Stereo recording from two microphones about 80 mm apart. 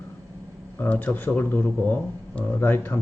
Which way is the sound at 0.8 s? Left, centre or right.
Left.